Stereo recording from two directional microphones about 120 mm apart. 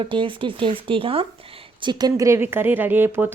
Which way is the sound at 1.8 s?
35° right (ahead or behind).